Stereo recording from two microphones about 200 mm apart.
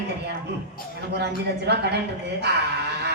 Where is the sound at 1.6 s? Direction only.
55° right (ahead or behind).